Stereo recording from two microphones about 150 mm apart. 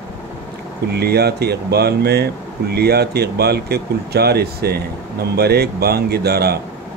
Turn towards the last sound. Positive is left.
turn(degrees=-90)